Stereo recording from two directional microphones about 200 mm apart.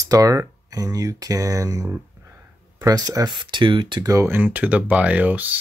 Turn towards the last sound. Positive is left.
turn(degrees=-10)  # may be behind; listen again after turning